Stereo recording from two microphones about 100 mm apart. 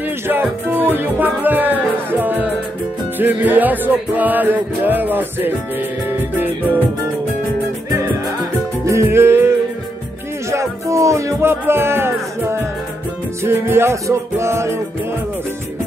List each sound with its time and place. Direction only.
0.3 s music: 20° right (ahead or behind)
8.8 s music: 30° right (ahead or behind)
10.5 s speech: 30° right (ahead or behind)
13.4 s music: 25° right (ahead or behind)